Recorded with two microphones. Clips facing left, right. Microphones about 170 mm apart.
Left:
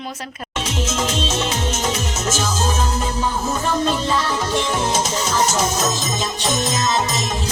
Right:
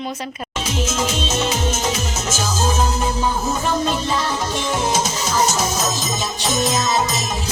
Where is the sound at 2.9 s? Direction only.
10° right (ahead or behind).